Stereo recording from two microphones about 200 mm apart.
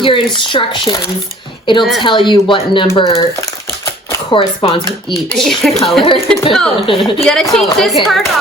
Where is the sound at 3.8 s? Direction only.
20° left (ahead or behind).